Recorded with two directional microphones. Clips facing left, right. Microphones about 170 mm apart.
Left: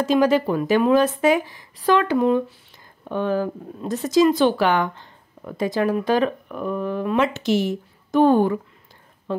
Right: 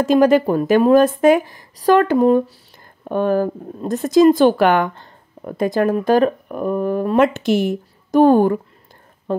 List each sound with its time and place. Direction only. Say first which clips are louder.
0.0 s speech: right 5 dB; 50° right (ahead or behind)